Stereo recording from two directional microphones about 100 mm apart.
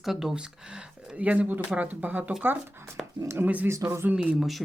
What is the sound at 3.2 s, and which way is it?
Speech, 25° right (ahead or behind).